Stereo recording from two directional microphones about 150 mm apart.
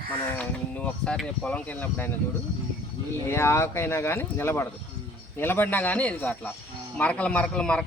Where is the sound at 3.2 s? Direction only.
15° left (ahead or behind).